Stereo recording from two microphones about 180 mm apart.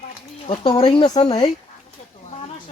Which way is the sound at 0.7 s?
25° left (ahead or behind).